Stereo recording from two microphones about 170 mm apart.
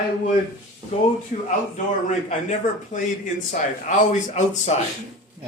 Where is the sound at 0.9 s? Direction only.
40° left (ahead or behind).